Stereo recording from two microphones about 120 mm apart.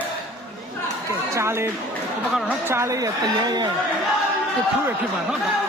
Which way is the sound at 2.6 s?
25° right (ahead or behind).